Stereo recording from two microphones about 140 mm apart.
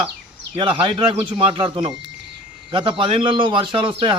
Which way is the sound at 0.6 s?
35° right (ahead or behind).